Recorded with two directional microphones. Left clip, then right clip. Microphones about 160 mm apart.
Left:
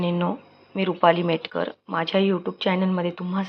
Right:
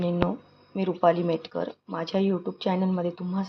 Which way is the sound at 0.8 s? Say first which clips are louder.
Left 4 dB; centre (ahead or behind).